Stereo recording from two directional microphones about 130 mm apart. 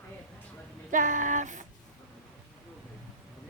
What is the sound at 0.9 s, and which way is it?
Speech, 75° right (ahead or behind).